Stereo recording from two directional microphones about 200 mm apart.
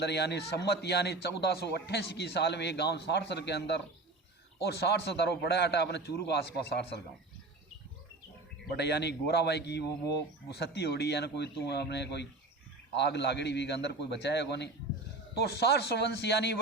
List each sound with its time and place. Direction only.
0.0 s a man's voice: 55° left (ahead or behind)
8.7 s a man's voice: 55° left (ahead or behind)